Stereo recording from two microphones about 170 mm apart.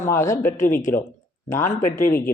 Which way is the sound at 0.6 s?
55° left (ahead or behind).